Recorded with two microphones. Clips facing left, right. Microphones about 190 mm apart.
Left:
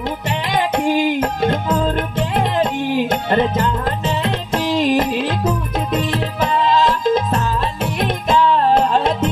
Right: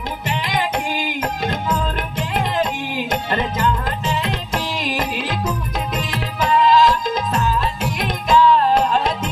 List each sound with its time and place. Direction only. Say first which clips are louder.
1.4 s music: left 4 dB; 30° left (ahead or behind)